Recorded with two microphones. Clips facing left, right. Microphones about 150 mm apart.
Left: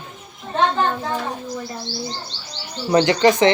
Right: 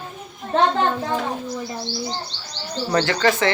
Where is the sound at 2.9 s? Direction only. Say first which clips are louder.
Left 5 dB; 20° left (ahead or behind).